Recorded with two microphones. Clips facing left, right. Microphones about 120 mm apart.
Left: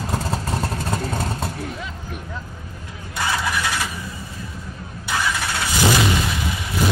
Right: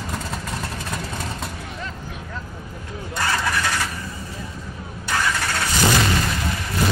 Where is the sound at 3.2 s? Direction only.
5° left (ahead or behind).